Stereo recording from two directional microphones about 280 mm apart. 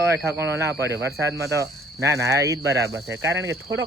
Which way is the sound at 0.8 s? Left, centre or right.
Right.